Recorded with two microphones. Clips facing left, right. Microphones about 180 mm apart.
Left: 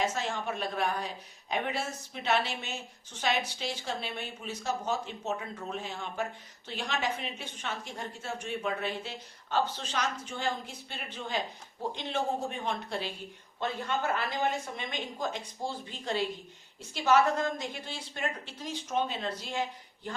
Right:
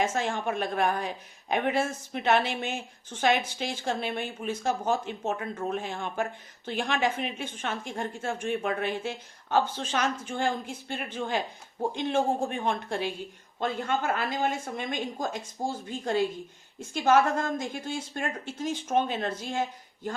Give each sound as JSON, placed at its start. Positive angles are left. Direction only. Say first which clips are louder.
{"t": 0.0, "sound": "a woman's voice", "louder": "right 4 dB", "side_deg": -50}